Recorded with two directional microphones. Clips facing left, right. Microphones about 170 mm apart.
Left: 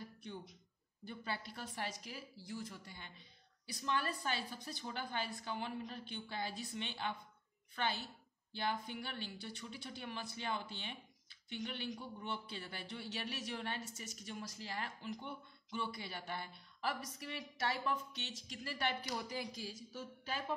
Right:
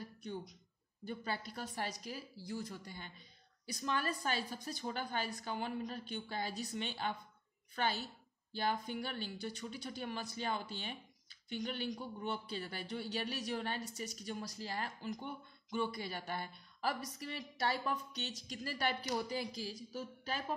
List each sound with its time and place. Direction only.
0.2 s a woman's voice: 40° right (ahead or behind)